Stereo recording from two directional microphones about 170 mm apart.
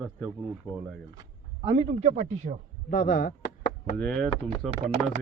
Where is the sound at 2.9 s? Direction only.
55° left (ahead or behind).